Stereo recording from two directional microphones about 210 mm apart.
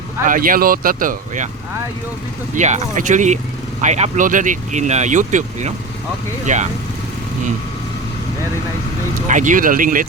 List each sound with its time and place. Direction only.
0.3 s speech: 40° right (ahead or behind)
2.6 s speech: 35° right (ahead or behind)
9.3 s speech: 35° right (ahead or behind)